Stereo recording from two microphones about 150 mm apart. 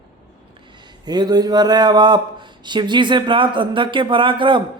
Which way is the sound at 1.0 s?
25° right (ahead or behind).